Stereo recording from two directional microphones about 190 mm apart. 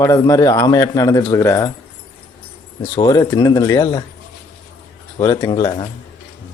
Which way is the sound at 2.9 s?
20° left (ahead or behind).